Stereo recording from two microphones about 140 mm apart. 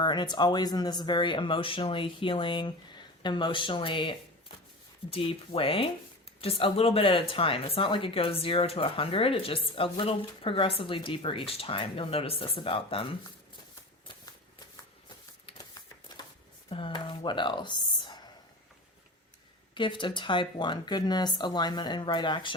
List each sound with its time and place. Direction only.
0.0 s speech: 30° left (ahead or behind)
5.1 s speech: 40° left (ahead or behind)
16.1 s a sound: 30° left (ahead or behind)
16.6 s speech: 40° left (ahead or behind)
19.7 s speech: 35° left (ahead or behind)